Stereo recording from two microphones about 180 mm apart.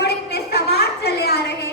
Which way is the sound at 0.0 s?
60° left (ahead or behind).